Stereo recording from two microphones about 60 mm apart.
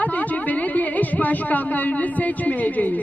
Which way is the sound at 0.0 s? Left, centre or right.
Left.